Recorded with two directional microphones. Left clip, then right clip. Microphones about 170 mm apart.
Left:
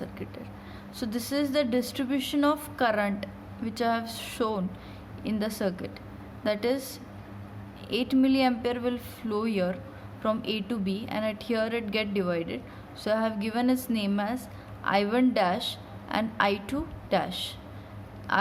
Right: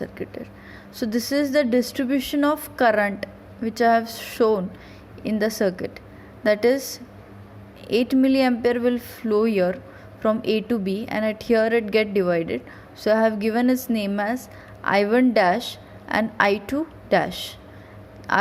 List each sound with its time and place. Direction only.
0.0 s a sound: 35° right (ahead or behind)
0.9 s a woman's voice: 35° right (ahead or behind)
14.8 s a woman's voice: 40° right (ahead or behind)